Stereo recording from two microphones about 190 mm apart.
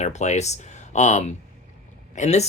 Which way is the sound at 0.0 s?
35° left (ahead or behind).